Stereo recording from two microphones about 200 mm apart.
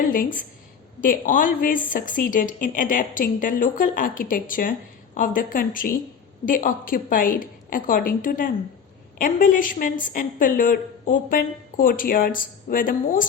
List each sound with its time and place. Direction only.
0.1 s a woman's voice: 40° left (ahead or behind)